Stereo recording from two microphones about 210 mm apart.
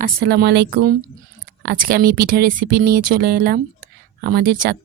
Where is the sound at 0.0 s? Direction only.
50° right (ahead or behind).